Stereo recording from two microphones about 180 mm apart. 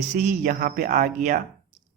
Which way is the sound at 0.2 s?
55° right (ahead or behind).